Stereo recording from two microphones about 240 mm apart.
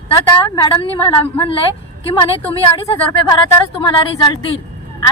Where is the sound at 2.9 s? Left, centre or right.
Centre.